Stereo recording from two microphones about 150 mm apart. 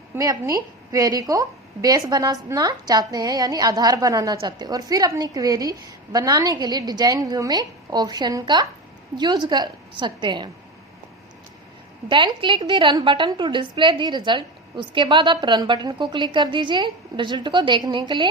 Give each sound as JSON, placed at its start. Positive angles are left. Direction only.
{"t": 0.1, "sound": "a woman's voice", "side_deg": -20}
{"t": 12.0, "sound": "a woman's voice", "side_deg": -30}